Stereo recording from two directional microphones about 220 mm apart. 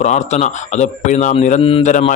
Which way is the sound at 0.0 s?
30° left (ahead or behind).